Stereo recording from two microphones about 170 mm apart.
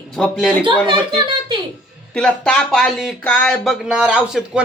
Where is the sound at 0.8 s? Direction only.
30° right (ahead or behind).